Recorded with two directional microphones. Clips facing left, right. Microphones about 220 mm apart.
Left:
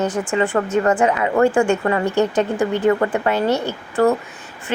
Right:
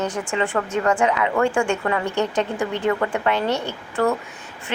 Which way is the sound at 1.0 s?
45° left (ahead or behind).